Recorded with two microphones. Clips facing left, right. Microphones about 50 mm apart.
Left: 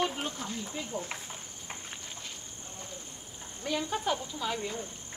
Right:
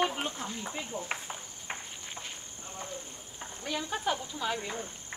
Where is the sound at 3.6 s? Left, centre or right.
Centre.